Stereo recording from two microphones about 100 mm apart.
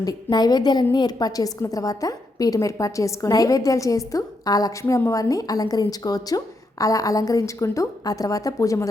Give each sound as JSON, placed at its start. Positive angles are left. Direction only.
{"t": 0.0, "sound": "a woman's voice", "side_deg": 40}